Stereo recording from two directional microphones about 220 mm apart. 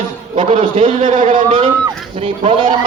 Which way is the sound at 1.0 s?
35° right (ahead or behind).